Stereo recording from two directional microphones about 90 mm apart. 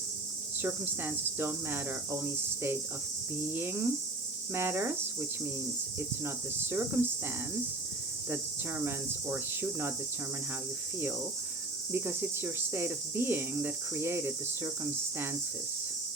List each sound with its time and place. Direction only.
0.6 s speech: 20° right (ahead or behind)
6.0 s speech: 25° right (ahead or behind)
8.8 s speech: 25° right (ahead or behind)
11.9 s speech: 25° right (ahead or behind)